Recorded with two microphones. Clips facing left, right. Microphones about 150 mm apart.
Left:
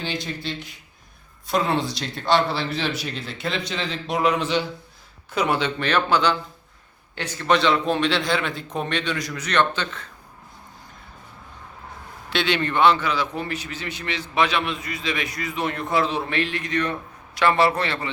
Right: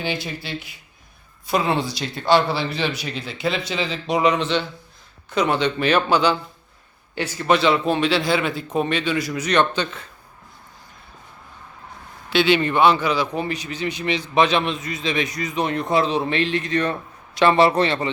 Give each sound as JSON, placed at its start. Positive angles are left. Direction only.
{"t": 0.0, "sound": "a man's voice", "side_deg": -5}
{"t": 5.8, "sound": "a man's voice", "side_deg": -10}
{"t": 12.3, "sound": "a man's voice", "side_deg": -5}